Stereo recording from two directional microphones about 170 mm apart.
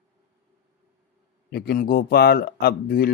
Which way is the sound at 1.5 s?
65° left (ahead or behind).